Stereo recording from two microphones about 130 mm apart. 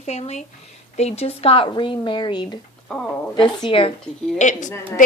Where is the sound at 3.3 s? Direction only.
35° left (ahead or behind).